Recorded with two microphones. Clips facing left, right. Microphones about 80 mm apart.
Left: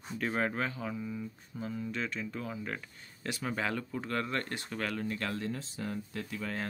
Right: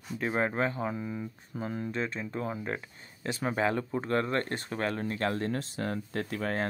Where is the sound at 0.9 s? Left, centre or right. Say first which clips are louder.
Right 2 dB; right.